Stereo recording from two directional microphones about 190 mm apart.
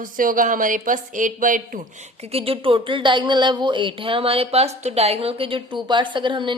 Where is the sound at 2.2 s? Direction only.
30° right (ahead or behind).